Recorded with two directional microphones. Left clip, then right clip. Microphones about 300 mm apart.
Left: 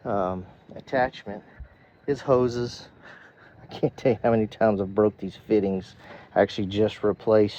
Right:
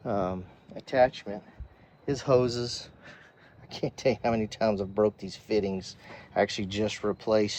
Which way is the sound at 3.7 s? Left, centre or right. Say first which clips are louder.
Left 4 dB; left.